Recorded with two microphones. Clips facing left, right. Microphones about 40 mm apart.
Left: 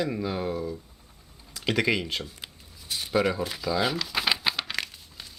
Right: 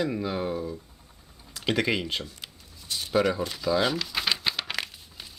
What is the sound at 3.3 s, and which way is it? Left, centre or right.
Crumpling, centre.